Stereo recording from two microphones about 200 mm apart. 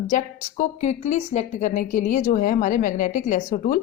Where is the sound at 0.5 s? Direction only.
35° left (ahead or behind).